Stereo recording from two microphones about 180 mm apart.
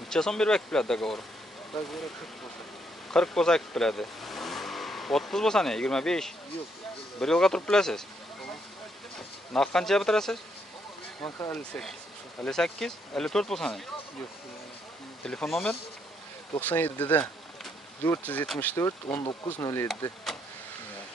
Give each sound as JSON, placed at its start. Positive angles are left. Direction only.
{"t": 0.1, "sound": "speech", "side_deg": 5}
{"t": 3.1, "sound": "speech", "side_deg": 5}
{"t": 9.5, "sound": "speech", "side_deg": 5}
{"t": 11.1, "sound": "speech", "side_deg": 20}
{"t": 11.5, "sound": "speech", "side_deg": 5}
{"t": 15.2, "sound": "speech", "side_deg": 5}
{"t": 19.1, "sound": "speech", "side_deg": 25}